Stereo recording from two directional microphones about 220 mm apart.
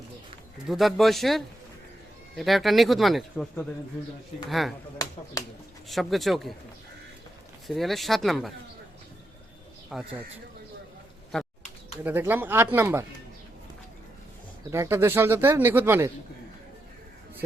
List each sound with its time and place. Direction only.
0.7 s speech: centre (ahead or behind)
5.0 s speech: 15° left (ahead or behind)
5.9 s speech: centre (ahead or behind)
7.7 s speech: centre (ahead or behind)
9.9 s speech: 5° right (ahead or behind)
11.3 s typing: centre (ahead or behind)
12.0 s speech: 10° right (ahead or behind)
14.7 s speech: 10° right (ahead or behind)